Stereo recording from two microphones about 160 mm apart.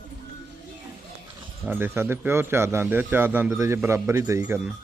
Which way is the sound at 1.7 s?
15° right (ahead or behind).